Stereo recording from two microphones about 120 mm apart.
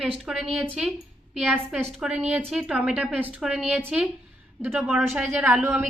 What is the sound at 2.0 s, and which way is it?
A woman's voice, 5° right (ahead or behind).